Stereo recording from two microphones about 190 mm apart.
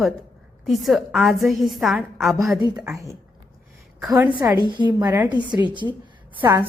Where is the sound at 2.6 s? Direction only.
25° right (ahead or behind).